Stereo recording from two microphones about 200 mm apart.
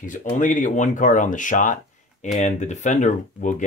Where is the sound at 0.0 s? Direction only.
40° left (ahead or behind).